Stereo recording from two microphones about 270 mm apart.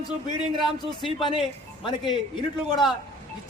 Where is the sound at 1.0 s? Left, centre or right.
Centre.